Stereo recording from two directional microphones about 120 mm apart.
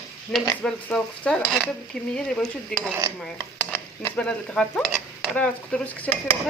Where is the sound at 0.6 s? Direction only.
10° left (ahead or behind).